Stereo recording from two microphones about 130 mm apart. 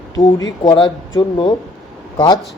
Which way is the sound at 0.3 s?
30° left (ahead or behind).